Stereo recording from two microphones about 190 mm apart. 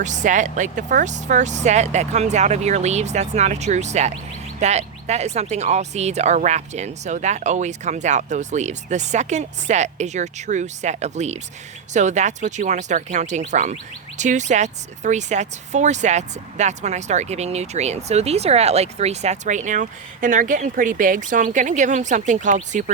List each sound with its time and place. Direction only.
0.0 s speech: 40° right (ahead or behind)